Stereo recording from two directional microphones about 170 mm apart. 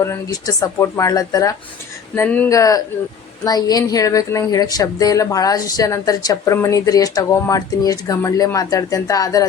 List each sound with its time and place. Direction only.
0.0 s a woman's voice: 20° left (ahead or behind)
2.1 s speech: 10° left (ahead or behind)
2.5 s a woman's voice: 20° left (ahead or behind)